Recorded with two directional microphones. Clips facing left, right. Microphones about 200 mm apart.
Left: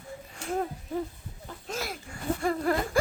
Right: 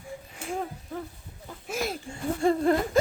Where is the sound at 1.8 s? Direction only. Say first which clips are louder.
Right 8 dB; 25° right (ahead or behind).